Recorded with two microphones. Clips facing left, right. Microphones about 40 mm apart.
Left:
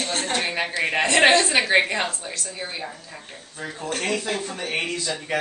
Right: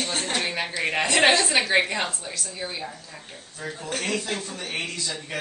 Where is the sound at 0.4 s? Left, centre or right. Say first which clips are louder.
Left 3 dB; centre.